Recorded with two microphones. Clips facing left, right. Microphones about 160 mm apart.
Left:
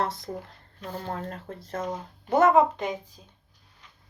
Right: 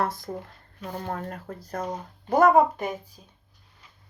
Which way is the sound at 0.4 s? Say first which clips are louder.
Right 1 dB; 45° right (ahead or behind).